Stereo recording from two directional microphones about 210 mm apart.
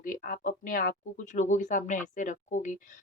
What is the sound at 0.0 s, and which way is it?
Speech, 40° left (ahead or behind).